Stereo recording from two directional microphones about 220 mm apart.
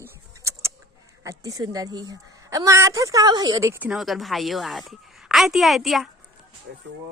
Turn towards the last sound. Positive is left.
turn(degrees=0)  # may be behind; listen again after turning